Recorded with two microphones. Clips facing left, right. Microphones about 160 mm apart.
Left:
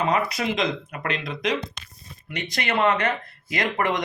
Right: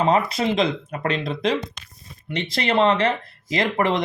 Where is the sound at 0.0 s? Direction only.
30° right (ahead or behind).